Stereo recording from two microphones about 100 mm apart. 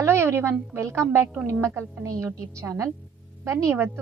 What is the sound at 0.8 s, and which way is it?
A woman's voice, 30° right (ahead or behind).